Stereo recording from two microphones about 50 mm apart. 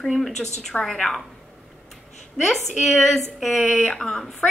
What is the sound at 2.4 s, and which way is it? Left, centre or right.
A woman's voice, centre.